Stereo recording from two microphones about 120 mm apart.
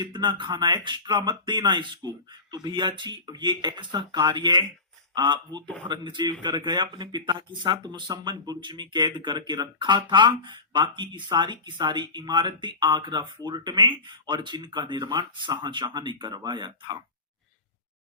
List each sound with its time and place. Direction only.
0.0 s speech: 40° right (ahead or behind)